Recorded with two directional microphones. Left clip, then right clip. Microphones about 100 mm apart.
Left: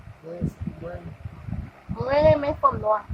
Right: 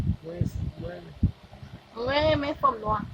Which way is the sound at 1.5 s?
30° right (ahead or behind).